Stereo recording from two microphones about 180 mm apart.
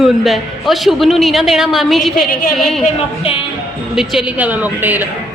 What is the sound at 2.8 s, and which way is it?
Speech, 30° left (ahead or behind).